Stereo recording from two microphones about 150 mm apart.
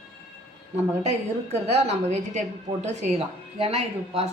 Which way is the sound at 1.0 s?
45° right (ahead or behind).